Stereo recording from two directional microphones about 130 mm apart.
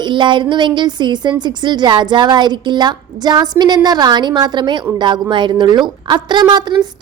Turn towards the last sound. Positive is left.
turn(degrees=-35)  # may be behind; listen again after turning